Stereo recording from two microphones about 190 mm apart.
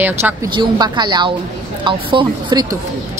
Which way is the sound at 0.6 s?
20° right (ahead or behind).